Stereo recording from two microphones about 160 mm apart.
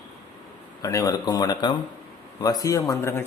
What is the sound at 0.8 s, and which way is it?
Speech, 20° left (ahead or behind).